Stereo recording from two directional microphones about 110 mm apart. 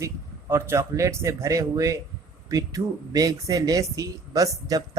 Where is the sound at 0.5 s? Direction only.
25° right (ahead or behind).